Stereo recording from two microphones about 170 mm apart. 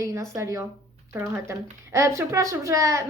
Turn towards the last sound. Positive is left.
turn(degrees=-15)  # may be behind; listen again after turning